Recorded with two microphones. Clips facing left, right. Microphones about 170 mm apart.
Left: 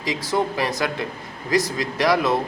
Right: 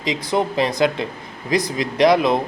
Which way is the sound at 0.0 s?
20° right (ahead or behind).